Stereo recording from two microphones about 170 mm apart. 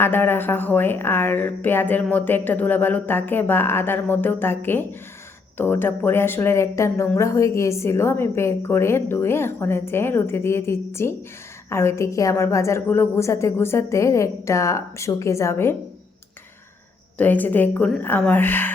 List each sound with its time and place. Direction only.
0.0 s a woman's voice: 10° left (ahead or behind)
17.2 s a woman's voice: 10° left (ahead or behind)